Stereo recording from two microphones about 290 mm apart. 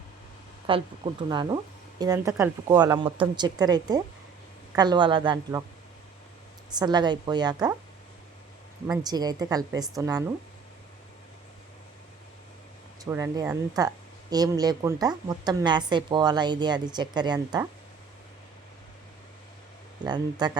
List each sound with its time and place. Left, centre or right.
0.7 s speech: centre
6.7 s speech: centre
9.0 s speech: centre
13.1 s speech: centre
20.4 s speech: centre